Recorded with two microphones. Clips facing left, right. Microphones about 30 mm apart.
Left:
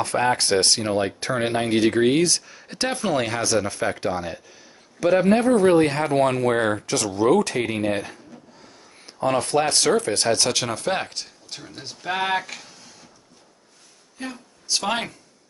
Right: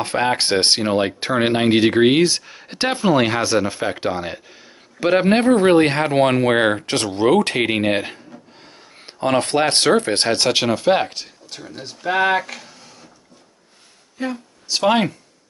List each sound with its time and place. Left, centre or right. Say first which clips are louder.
0.0 s speech: right 2 dB; right
5.1 s speech: right 3 dB; right; by 11.3 s centre
11.4 s speech: right 3 dB; centre
14.1 s speech: right 8 dB; centre